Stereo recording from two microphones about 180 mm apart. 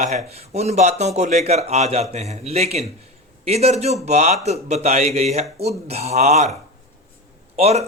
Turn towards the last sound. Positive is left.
turn(degrees=-35)  # may be behind; listen again after turning